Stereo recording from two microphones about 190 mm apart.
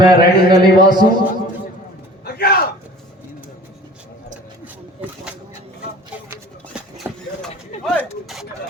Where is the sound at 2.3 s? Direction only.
55° left (ahead or behind).